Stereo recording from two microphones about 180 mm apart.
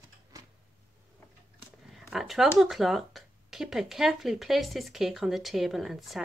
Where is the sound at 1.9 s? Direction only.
Centre (ahead or behind).